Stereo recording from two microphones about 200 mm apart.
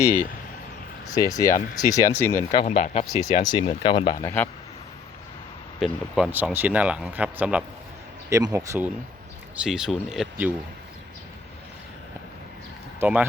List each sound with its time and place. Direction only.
1.1 s speech: 15° left (ahead or behind)
2.6 s speech: 35° left (ahead or behind)
3.5 s speech: 25° left (ahead or behind)
4.2 s speech: 10° left (ahead or behind)
5.8 s speech: 5° right (ahead or behind)
9.6 s speech: 5° right (ahead or behind)
13.0 s speech: 5° right (ahead or behind)